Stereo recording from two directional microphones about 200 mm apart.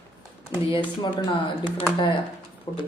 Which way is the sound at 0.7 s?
25° left (ahead or behind).